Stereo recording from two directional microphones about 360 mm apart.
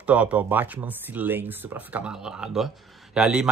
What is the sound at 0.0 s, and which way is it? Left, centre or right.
Speech, centre.